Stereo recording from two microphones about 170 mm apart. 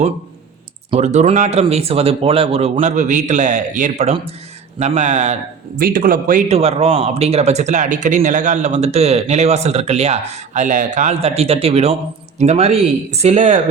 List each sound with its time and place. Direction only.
0.9 s a man's voice: 40° right (ahead or behind)
5.8 s a man's voice: 55° right (ahead or behind)
6.6 s speech: 35° right (ahead or behind)